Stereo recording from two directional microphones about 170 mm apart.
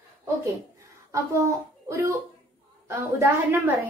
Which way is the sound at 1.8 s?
15° right (ahead or behind).